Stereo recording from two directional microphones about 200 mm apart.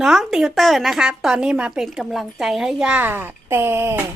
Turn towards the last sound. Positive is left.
turn(degrees=-10)  # may be behind; listen again after turning